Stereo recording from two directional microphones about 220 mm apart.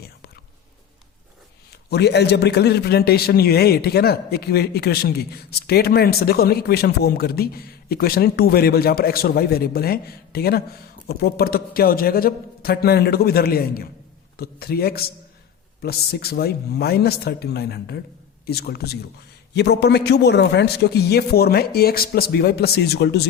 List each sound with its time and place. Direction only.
1.7 s a man's voice: 50° left (ahead or behind)